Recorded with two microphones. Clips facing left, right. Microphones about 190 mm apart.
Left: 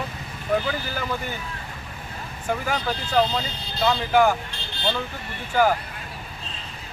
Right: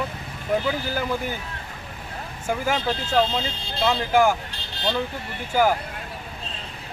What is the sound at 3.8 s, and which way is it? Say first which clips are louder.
Speech: even; 10° right (ahead or behind).